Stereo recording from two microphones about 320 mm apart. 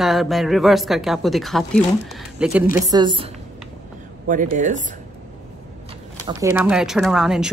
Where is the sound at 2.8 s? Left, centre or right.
Centre.